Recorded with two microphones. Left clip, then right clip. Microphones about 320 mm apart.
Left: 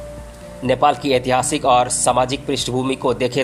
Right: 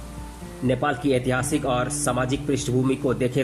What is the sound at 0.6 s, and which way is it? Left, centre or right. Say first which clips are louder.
Speech: left 7 dB; centre.